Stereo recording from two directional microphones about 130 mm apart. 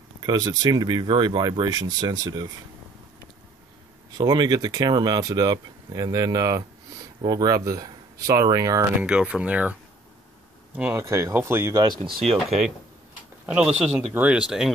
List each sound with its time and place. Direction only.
0.2 s speech: 35° right (ahead or behind)
4.2 s speech: 30° right (ahead or behind)
9.0 s speech: 10° right (ahead or behind)
10.8 s speech: 15° right (ahead or behind)
12.3 s speech: 60° right (ahead or behind)
13.5 s speech: 5° right (ahead or behind)